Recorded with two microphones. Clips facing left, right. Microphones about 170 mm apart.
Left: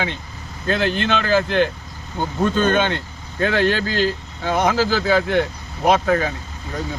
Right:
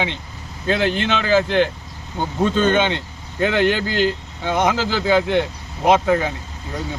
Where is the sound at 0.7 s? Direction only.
15° right (ahead or behind).